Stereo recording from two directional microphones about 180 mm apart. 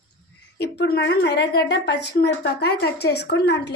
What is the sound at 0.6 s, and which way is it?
A woman's voice, 65° left (ahead or behind).